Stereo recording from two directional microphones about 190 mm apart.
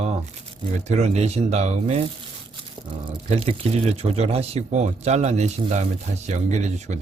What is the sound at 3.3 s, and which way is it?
Speech, 35° right (ahead or behind).